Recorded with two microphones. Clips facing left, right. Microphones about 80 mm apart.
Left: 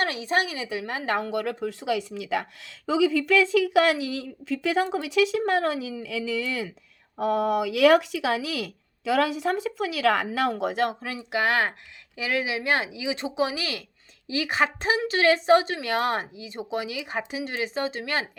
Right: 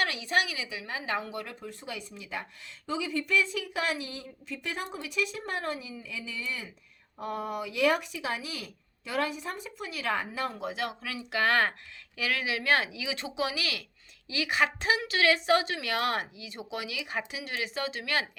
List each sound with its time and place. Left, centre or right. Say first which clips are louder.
0.0 s speech: left 3 dB; left
11.1 s a woman's voice: left 2 dB; left